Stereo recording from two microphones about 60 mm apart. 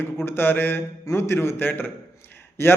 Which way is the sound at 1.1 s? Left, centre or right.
Left.